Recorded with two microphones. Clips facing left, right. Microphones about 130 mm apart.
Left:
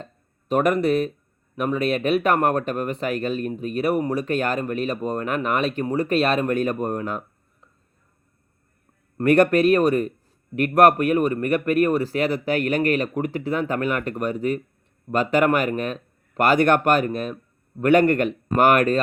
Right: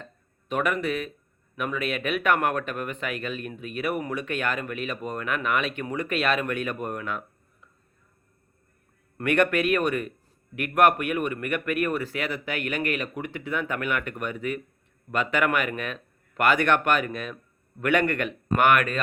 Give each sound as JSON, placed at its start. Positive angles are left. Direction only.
{"t": 0.0, "sound": "a sound", "side_deg": 40}
{"t": 1.5, "sound": "speech", "side_deg": 35}
{"t": 9.1, "sound": "speech", "side_deg": 35}